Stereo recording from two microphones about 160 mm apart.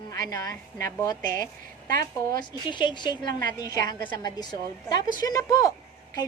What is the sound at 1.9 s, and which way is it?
Speech, 65° right (ahead or behind).